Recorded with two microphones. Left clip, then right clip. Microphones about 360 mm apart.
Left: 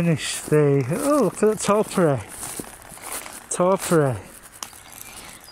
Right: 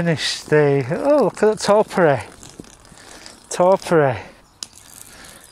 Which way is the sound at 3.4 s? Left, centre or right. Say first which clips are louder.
Right 5 dB; right.